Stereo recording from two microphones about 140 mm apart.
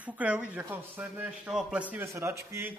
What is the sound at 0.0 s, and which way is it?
Speech, 10° right (ahead or behind).